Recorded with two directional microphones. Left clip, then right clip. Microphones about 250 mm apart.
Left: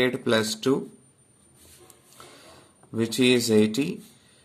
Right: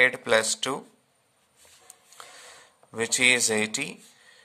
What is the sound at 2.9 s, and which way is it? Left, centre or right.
Speech, right.